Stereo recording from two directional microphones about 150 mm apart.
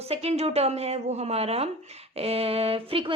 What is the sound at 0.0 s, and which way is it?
A woman's voice, 45° right (ahead or behind).